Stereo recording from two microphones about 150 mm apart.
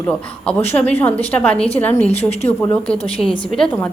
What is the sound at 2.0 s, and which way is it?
Speech, 45° left (ahead or behind).